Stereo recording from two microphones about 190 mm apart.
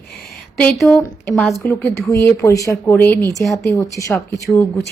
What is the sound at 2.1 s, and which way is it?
Speech, 15° left (ahead or behind).